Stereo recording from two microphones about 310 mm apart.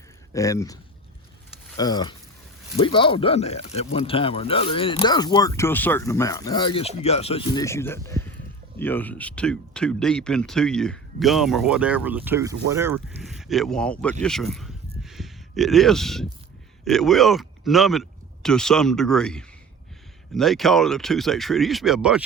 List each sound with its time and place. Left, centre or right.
0.3 s speech: centre